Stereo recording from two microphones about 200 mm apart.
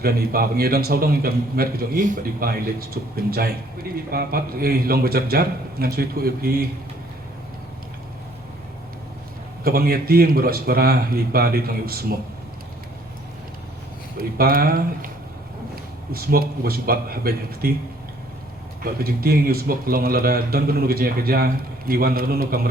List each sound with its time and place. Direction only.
0.0 s speech: 50° right (ahead or behind)
9.6 s speech: 50° right (ahead or behind)
14.2 s speech: 45° right (ahead or behind)
16.1 s speech: 50° right (ahead or behind)
18.8 s speech: 50° right (ahead or behind)